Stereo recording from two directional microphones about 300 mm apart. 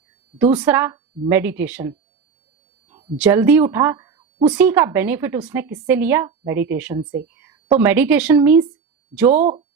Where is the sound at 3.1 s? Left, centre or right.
Centre.